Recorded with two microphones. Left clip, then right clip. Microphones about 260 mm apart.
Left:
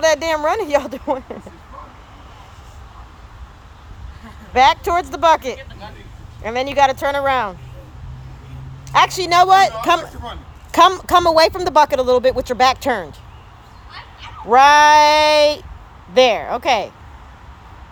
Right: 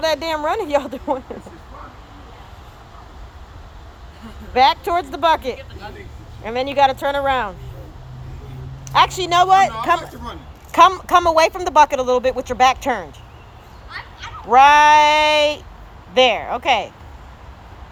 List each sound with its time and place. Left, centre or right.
0.0 s speech: centre
4.5 s speech: centre
9.1 s speech: left
9.5 s speech: centre
10.8 s speech: left
14.4 s speech: left